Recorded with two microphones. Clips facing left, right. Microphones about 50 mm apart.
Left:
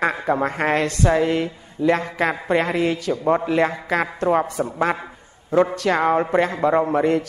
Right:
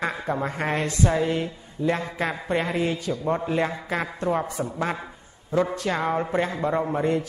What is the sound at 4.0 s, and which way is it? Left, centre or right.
Speech, left.